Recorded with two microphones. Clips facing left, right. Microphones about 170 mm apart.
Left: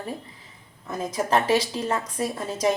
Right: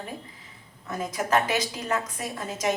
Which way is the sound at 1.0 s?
30° left (ahead or behind).